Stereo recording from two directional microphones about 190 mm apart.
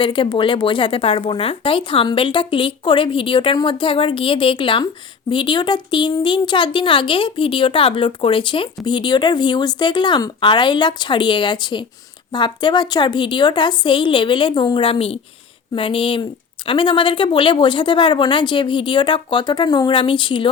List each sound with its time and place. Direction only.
0.0 s a woman's voice: 25° left (ahead or behind)